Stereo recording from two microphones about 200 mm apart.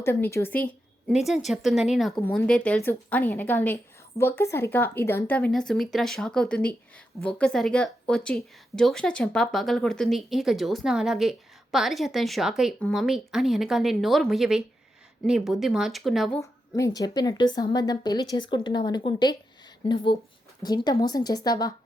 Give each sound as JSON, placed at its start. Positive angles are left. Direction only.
{"t": 0.0, "sound": "a woman's voice", "side_deg": 10}
{"t": 16.4, "sound": "a woman's voice", "side_deg": 15}
{"t": 20.6, "sound": "a woman's voice", "side_deg": 20}